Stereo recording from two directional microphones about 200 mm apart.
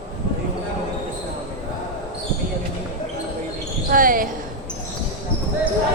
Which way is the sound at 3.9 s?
45° right (ahead or behind).